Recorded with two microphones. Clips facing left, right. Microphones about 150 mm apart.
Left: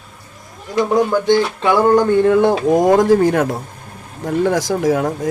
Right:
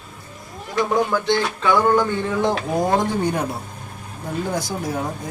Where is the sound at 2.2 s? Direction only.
60° left (ahead or behind).